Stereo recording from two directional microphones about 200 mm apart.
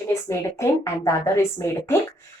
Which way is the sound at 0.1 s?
15° left (ahead or behind).